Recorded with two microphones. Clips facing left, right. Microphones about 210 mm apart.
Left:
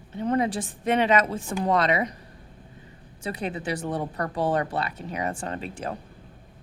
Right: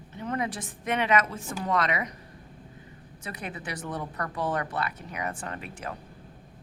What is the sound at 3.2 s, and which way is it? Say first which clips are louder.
Speech: left 8 dB; 30° left (ahead or behind).